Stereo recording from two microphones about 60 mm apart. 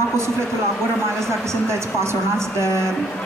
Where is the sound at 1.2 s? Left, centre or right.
Right.